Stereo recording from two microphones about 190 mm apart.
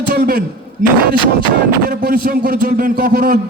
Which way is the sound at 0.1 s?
50° right (ahead or behind).